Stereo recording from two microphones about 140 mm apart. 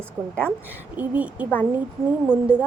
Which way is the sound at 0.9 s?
10° right (ahead or behind).